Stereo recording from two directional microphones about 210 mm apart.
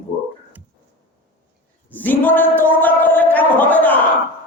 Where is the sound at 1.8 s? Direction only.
10° left (ahead or behind).